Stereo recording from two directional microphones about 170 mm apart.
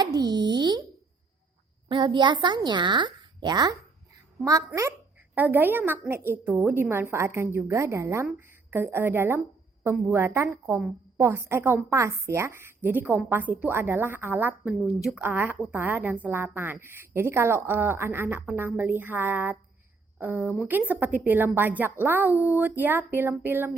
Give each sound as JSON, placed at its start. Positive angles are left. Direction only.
{"t": 0.0, "sound": "plop", "side_deg": -25}
{"t": 1.9, "sound": "a woman's voice", "side_deg": -30}